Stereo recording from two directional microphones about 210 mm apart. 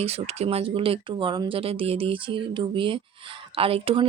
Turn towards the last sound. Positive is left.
turn(degrees=-25)  # may be behind; listen again after turning